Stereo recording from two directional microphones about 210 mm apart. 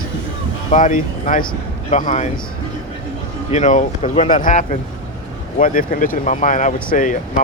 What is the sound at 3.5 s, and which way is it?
Speech, 35° left (ahead or behind).